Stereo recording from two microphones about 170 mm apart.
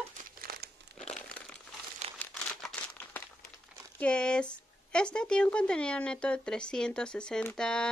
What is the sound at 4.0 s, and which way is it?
Speech, 5° left (ahead or behind).